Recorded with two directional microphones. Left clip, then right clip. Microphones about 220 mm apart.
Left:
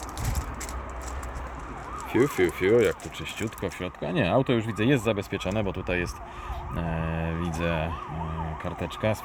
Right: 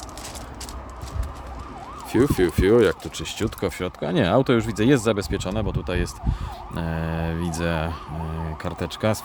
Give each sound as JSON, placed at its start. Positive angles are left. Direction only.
{"t": 2.1, "sound": "speech", "side_deg": -30}
{"t": 5.4, "sound": "speech", "side_deg": -15}